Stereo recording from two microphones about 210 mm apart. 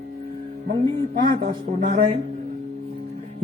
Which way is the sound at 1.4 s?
45° right (ahead or behind).